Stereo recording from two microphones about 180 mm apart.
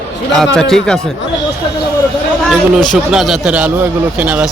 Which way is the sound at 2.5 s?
Centre (ahead or behind).